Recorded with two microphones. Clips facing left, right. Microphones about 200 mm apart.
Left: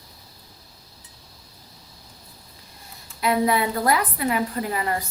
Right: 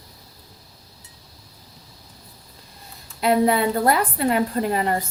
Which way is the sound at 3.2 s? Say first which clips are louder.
Right 3 dB; 30° right (ahead or behind).